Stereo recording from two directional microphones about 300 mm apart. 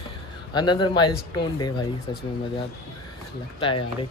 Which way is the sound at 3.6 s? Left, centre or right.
Centre.